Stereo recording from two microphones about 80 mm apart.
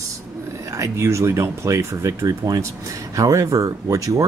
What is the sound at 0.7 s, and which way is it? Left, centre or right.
Speech, right.